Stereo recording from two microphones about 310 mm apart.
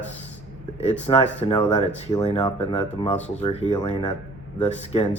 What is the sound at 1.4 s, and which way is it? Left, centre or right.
Speech, centre.